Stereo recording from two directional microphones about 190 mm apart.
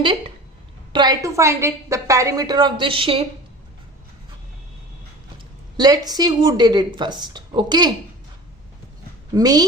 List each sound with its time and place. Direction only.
0.9 s a woman's voice: 20° right (ahead or behind)
5.7 s a woman's voice: 20° right (ahead or behind)
9.3 s a woman's voice: 20° right (ahead or behind)